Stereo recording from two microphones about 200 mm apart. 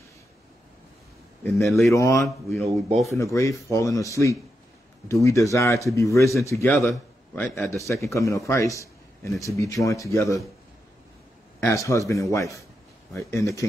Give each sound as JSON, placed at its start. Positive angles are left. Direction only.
{"t": 1.5, "sound": "speech", "side_deg": 0}
{"t": 2.0, "sound": "speech", "side_deg": 15}
{"t": 2.2, "sound": "speech", "side_deg": 0}
{"t": 3.1, "sound": "speech", "side_deg": 15}
{"t": 5.0, "sound": "a man's voice", "side_deg": 15}
{"t": 11.6, "sound": "speech", "side_deg": 15}